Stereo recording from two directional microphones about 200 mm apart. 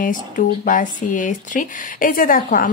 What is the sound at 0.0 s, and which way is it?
Speech, 40° left (ahead or behind).